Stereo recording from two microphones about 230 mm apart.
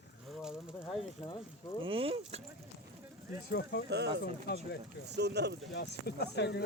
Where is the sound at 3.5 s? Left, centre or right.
Left.